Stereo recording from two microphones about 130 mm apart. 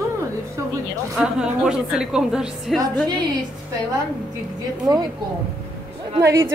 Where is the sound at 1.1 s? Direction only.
5° right (ahead or behind).